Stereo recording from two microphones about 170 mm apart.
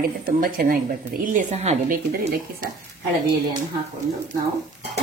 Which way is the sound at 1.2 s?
45° right (ahead or behind).